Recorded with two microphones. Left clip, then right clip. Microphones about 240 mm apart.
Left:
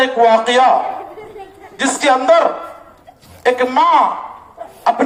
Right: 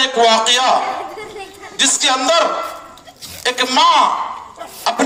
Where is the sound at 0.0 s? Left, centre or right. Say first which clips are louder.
Left 1 dB; right.